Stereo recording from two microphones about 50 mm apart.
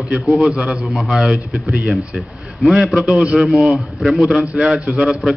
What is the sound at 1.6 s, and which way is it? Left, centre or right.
Speech, right.